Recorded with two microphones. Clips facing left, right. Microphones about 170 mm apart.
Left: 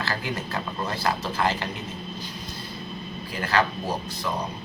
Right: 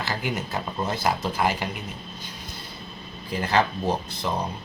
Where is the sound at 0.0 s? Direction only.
20° right (ahead or behind).